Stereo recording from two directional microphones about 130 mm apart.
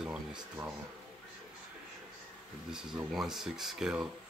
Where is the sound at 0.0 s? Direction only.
5° right (ahead or behind).